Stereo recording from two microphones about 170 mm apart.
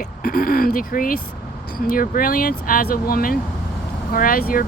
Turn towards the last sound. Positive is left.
turn(degrees=55)  # may be behind; listen again after turning